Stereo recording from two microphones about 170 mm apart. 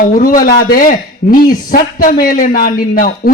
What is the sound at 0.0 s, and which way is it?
A man's voice, 55° left (ahead or behind).